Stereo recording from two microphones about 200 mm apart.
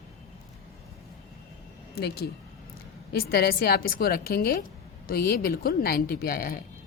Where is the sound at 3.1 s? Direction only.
50° left (ahead or behind).